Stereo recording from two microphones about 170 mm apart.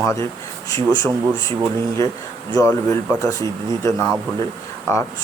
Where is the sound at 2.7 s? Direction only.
10° left (ahead or behind).